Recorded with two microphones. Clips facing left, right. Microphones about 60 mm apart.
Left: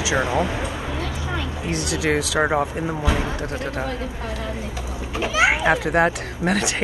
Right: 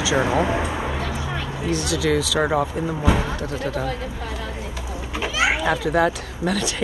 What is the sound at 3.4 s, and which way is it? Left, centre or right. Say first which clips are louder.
Speech: right 1 dB; left.